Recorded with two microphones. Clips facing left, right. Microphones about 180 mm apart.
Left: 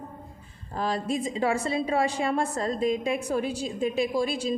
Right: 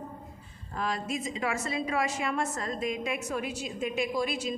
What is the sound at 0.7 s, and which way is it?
A woman's voice, 30° left (ahead or behind).